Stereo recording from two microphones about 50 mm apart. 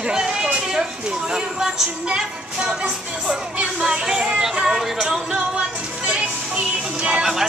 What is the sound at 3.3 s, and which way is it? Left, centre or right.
Music, centre.